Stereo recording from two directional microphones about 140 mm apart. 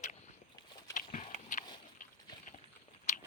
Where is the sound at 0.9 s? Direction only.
55° left (ahead or behind).